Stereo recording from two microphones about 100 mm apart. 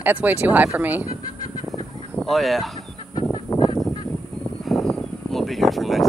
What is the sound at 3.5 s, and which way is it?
Fowl, 45° left (ahead or behind).